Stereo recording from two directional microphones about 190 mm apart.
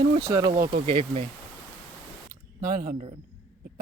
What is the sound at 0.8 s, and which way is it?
Speech, 35° right (ahead or behind).